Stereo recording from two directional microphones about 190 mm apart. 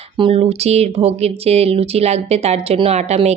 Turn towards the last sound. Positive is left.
turn(degrees=-35)  # may be behind; listen again after turning